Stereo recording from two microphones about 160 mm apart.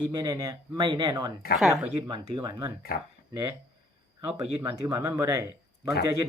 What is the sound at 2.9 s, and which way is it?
Speech, 65° left (ahead or behind).